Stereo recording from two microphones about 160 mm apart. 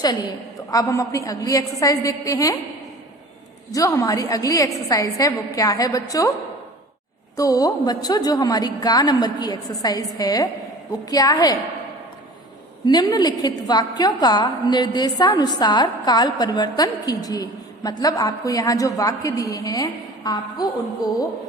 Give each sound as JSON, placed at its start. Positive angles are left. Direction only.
{"t": 0.0, "sound": "a woman's voice", "side_deg": 25}
{"t": 3.7, "sound": "a woman's voice", "side_deg": 20}
{"t": 7.3, "sound": "a woman's voice", "side_deg": 20}
{"t": 12.8, "sound": "a woman's voice", "side_deg": 25}